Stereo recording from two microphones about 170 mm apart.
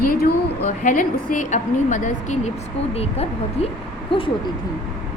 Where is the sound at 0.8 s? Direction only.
50° left (ahead or behind).